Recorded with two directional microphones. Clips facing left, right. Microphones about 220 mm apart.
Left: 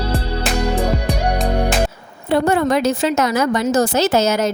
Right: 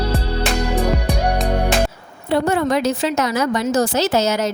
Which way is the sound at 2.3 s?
50° left (ahead or behind).